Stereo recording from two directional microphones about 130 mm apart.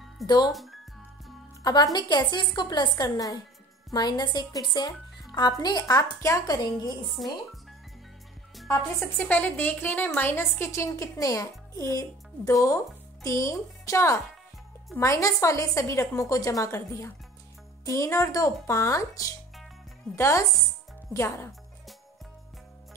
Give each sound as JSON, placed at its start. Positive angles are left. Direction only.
{"t": 0.5, "sound": "speech", "side_deg": 0}
{"t": 1.6, "sound": "a woman's voice", "side_deg": 30}
{"t": 7.2, "sound": "speech", "side_deg": 0}
{"t": 9.2, "sound": "a woman's voice", "side_deg": 15}